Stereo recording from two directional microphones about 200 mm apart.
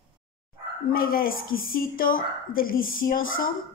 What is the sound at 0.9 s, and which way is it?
A woman's voice, 45° left (ahead or behind).